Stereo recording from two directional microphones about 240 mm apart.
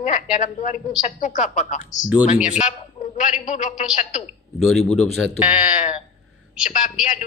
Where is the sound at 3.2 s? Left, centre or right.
Left.